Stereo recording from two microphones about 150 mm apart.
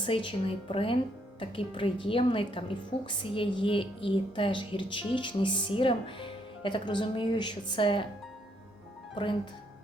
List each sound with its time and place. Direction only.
0.0 s a woman's voice: 35° left (ahead or behind)